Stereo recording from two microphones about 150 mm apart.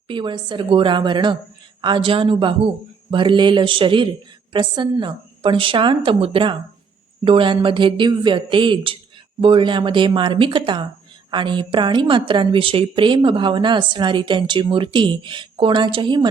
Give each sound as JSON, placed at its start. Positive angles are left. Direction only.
{"t": 0.1, "sound": "a woman's voice", "side_deg": -35}